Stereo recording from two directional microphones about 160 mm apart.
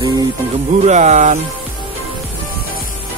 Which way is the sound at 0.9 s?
45° right (ahead or behind).